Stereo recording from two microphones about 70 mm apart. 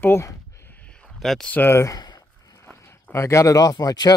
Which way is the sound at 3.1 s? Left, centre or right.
Left.